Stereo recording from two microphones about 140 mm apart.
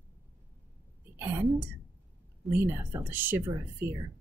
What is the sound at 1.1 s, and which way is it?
Speech, 15° right (ahead or behind).